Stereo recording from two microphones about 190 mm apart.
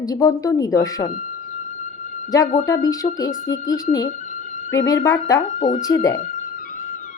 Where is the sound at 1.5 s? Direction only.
40° left (ahead or behind).